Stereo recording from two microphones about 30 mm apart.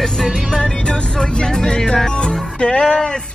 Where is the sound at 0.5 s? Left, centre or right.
Left.